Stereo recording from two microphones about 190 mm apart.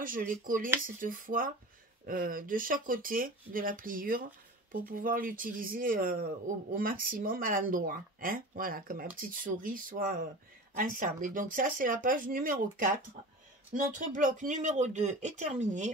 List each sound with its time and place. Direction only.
0.0 s a man's voice: 45° right (ahead or behind)